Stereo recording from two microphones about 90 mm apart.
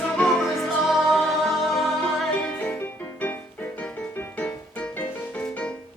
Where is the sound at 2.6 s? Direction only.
20° left (ahead or behind).